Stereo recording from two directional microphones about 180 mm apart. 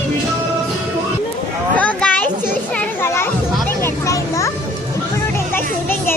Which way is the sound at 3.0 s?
15° left (ahead or behind).